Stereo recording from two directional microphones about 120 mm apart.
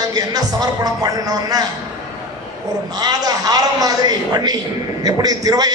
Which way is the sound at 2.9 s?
35° right (ahead or behind).